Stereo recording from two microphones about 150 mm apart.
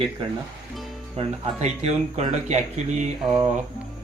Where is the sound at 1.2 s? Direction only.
45° right (ahead or behind).